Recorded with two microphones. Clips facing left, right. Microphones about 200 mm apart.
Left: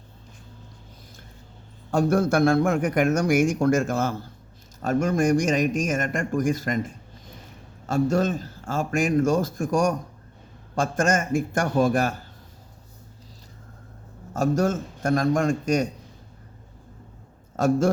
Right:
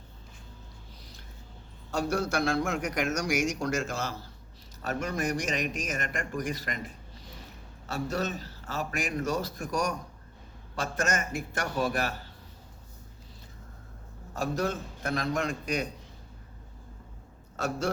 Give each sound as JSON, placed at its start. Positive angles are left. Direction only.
{"t": 1.9, "sound": "a man's voice", "side_deg": 50}
{"t": 14.3, "sound": "a man's voice", "side_deg": 45}
{"t": 17.6, "sound": "a man's voice", "side_deg": 50}